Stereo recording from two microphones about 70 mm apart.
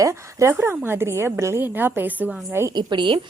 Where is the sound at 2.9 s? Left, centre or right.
Right.